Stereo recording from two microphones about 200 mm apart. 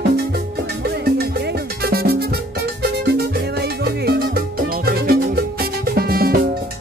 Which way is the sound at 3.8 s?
55° right (ahead or behind).